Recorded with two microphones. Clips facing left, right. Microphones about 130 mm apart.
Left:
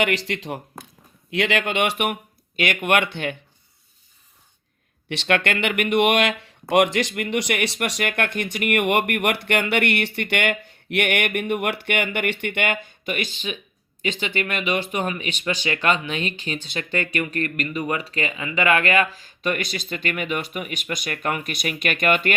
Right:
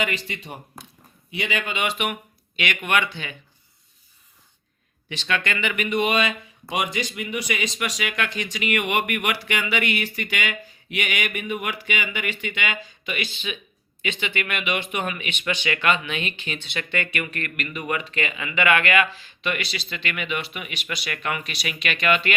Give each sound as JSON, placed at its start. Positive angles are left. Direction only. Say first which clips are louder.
{"t": 0.0, "sound": "speech", "louder": "left 5 dB", "side_deg": 85}
{"t": 5.0, "sound": "speech", "louder": "left 5 dB", "side_deg": 65}